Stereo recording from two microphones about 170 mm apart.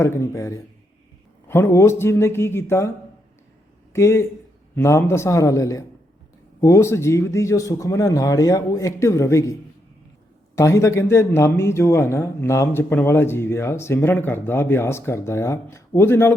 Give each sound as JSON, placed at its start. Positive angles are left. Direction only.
{"t": 0.0, "sound": "a man's voice", "side_deg": 15}
{"t": 3.9, "sound": "a man's voice", "side_deg": 15}